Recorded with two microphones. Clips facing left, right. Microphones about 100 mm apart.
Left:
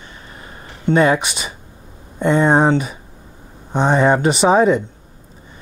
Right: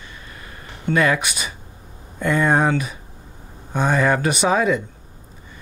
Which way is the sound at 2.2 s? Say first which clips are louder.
Left 4 dB; 25° left (ahead or behind).